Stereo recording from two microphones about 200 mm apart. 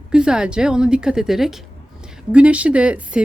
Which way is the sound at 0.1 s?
5° right (ahead or behind).